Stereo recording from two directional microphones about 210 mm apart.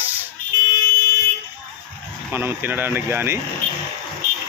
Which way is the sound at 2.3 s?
10° right (ahead or behind).